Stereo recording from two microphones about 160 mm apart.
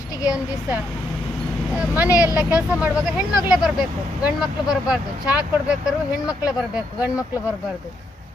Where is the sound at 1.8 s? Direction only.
10° right (ahead or behind).